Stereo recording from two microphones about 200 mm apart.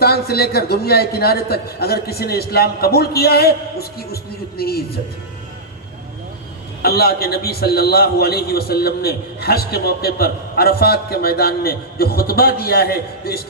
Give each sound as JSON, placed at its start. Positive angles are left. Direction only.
{"t": 0.0, "sound": "a man's voice", "side_deg": 50}
{"t": 6.8, "sound": "a man's voice", "side_deg": 50}